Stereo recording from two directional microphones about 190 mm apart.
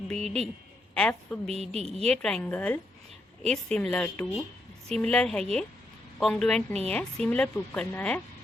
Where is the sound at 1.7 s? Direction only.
35° right (ahead or behind).